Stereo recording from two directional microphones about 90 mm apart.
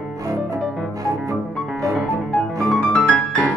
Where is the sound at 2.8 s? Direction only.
15° left (ahead or behind).